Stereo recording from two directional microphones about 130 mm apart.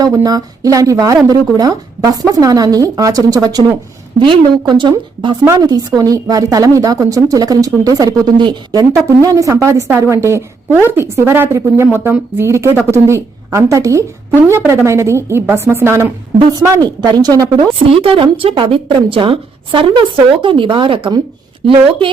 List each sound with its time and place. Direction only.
0.0 s a woman's voice: 25° right (ahead or behind)
18.0 s a woman's voice: 45° right (ahead or behind)